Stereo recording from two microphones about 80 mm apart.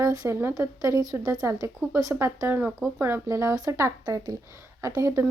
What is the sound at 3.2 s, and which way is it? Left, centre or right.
Speech, right.